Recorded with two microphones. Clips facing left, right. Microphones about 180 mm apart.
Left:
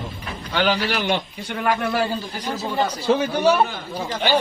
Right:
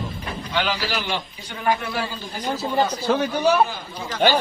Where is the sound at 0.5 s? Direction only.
60° left (ahead or behind).